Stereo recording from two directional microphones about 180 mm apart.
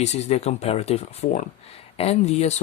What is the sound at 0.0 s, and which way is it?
Speech, 40° left (ahead or behind).